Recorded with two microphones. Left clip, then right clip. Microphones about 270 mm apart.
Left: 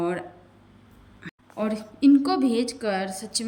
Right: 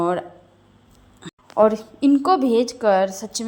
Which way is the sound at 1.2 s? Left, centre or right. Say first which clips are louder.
Right 14 dB; right.